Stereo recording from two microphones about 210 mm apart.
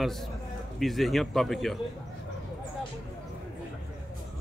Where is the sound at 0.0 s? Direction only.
Centre (ahead or behind).